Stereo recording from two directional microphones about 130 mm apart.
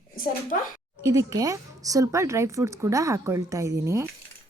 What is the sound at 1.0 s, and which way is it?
A woman's voice, 25° right (ahead or behind).